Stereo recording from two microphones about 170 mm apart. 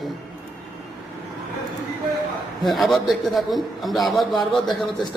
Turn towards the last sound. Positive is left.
turn(degrees=0)  # may be behind; listen again after turning